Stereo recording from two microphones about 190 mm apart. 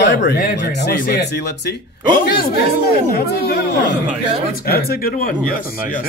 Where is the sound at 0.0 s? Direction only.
70° left (ahead or behind).